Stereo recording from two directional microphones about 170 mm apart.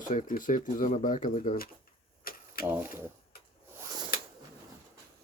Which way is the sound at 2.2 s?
60° left (ahead or behind).